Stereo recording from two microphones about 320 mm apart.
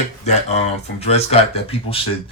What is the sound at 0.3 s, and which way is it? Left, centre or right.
Speech, left.